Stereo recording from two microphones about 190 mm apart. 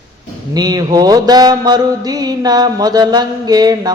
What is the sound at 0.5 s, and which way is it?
Mantra, 20° right (ahead or behind).